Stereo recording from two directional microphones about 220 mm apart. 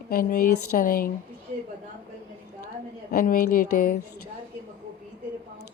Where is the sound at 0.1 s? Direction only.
40° left (ahead or behind).